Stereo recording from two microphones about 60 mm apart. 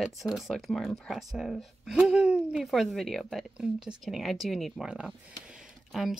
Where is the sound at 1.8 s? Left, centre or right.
Centre.